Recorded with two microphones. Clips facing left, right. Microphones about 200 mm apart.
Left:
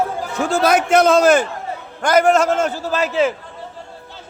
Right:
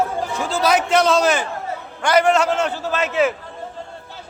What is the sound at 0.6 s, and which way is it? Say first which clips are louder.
A man's voice: left 2 dB; 50° left (ahead or behind).